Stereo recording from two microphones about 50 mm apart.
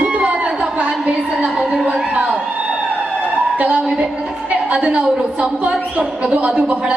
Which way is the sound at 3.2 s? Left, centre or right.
Right.